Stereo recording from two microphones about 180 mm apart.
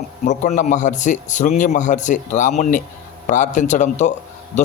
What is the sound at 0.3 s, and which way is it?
Speech, 40° left (ahead or behind).